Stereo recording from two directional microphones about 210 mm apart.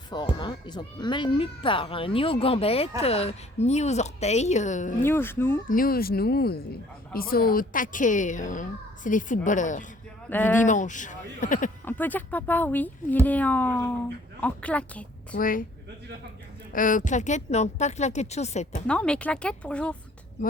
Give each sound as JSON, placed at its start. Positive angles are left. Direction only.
{"t": 0.1, "sound": "speech", "side_deg": 20}
{"t": 5.0, "sound": "speech", "side_deg": 10}
{"t": 5.6, "sound": "a woman's voice", "side_deg": 40}
{"t": 10.2, "sound": "speech", "side_deg": 10}
{"t": 10.6, "sound": "speech", "side_deg": 35}
{"t": 11.9, "sound": "speech", "side_deg": 10}
{"t": 15.4, "sound": "speech", "side_deg": 40}
{"t": 16.7, "sound": "speech", "side_deg": 40}
{"t": 18.9, "sound": "speech", "side_deg": 5}